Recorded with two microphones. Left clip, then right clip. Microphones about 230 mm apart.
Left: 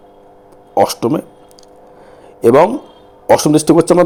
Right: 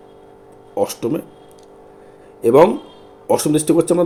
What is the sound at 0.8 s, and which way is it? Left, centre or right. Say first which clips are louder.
Speech: left 7 dB; left.